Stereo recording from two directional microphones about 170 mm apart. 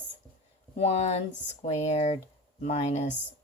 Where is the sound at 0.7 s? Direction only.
40° left (ahead or behind).